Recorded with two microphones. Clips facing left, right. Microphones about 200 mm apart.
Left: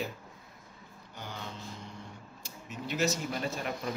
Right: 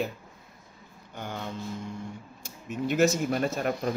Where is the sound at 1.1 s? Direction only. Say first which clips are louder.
Right 7 dB; 55° right (ahead or behind).